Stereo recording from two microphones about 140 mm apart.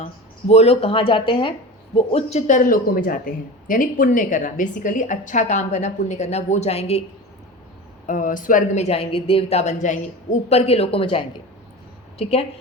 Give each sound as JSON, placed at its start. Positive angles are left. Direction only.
{"t": 0.0, "sound": "speech", "side_deg": 50}
{"t": 2.0, "sound": "speech", "side_deg": 50}
{"t": 8.0, "sound": "speech", "side_deg": 70}
{"t": 12.2, "sound": "speech", "side_deg": 45}